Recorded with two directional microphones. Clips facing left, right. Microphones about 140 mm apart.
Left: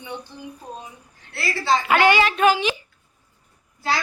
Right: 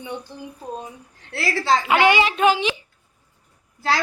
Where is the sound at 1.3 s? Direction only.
90° right.